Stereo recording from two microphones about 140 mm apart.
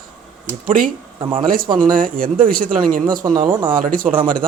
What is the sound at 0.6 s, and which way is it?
Speech, 85° right.